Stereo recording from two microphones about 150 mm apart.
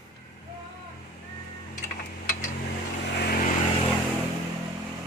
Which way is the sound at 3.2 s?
90° left.